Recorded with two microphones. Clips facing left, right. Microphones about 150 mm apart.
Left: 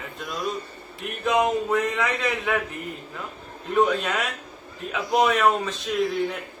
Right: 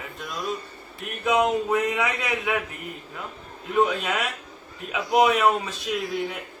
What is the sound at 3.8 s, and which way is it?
A man's voice, 5° right (ahead or behind).